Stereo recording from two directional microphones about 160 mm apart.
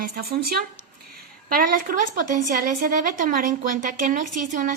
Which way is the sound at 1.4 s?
60° right (ahead or behind).